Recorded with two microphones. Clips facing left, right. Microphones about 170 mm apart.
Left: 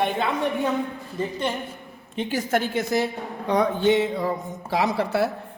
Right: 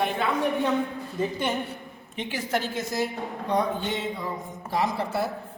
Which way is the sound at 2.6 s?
60° left (ahead or behind).